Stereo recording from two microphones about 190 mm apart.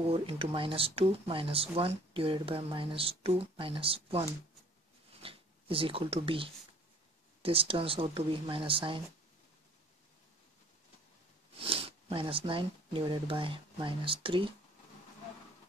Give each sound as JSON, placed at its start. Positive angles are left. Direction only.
{"t": 0.1, "sound": "speech", "side_deg": -30}
{"t": 11.6, "sound": "speech", "side_deg": -30}